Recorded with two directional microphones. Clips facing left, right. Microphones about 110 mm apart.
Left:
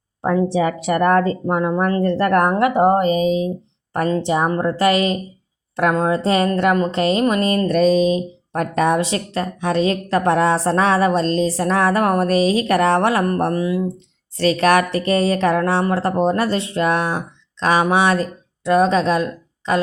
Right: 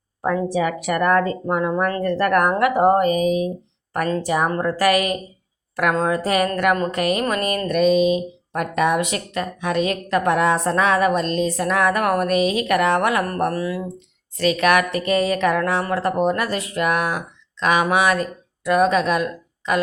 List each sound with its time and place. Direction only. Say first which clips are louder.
0.2 s speech: left 3 dB; 30° left (ahead or behind)
14.3 s speech: left 2 dB; 35° left (ahead or behind)